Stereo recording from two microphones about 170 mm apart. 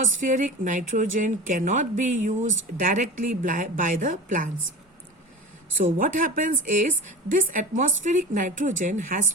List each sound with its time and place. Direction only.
0.0 s a woman's voice: 50° right (ahead or behind)
5.7 s a woman's voice: 50° right (ahead or behind)